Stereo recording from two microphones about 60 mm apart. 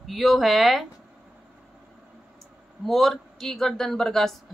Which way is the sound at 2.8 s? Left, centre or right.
Centre.